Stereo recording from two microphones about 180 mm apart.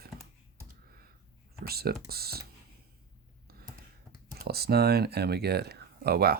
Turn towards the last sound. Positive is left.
turn(degrees=-60)  # may be behind; listen again after turning